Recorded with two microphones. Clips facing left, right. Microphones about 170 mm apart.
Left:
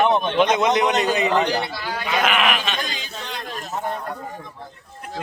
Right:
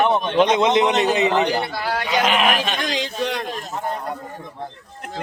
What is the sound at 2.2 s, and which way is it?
Speech, 30° right (ahead or behind).